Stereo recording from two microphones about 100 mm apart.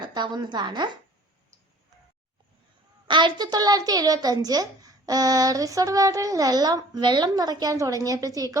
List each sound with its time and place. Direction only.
0.0 s a woman's voice: 50° right (ahead or behind)
3.1 s a woman's voice: 50° right (ahead or behind); by 8.5 s 35° right (ahead or behind)